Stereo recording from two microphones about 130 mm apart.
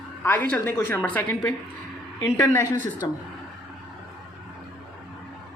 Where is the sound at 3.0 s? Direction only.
30° left (ahead or behind).